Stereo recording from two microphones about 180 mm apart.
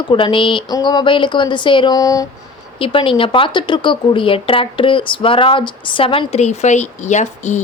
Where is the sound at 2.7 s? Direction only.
30° left (ahead or behind).